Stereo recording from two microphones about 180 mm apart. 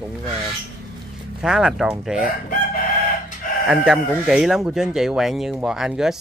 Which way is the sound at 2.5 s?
55° left (ahead or behind).